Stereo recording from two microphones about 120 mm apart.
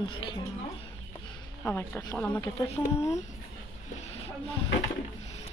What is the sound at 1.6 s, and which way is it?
A woman's voice, 15° left (ahead or behind).